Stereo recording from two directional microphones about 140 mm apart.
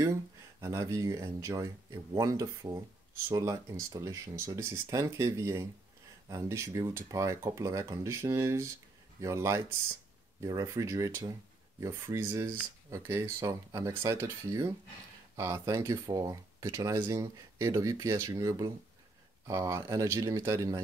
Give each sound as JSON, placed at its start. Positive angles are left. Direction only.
{"t": 0.0, "sound": "speech", "side_deg": -20}